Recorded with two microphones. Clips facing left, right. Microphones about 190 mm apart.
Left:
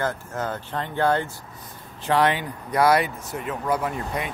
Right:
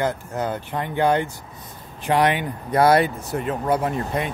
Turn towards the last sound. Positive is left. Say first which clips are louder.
# right 3 dB
turn(degrees=-30)  # may be behind; listen again after turning